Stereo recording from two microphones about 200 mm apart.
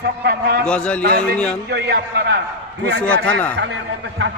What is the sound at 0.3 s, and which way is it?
Speech, 50° right (ahead or behind).